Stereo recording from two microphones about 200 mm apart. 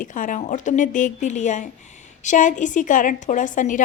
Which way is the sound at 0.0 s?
40° left (ahead or behind).